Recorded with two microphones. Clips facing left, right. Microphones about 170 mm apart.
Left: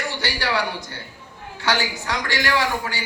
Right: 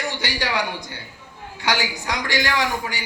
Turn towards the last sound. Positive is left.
turn(degrees=-15)  # may be behind; listen again after turning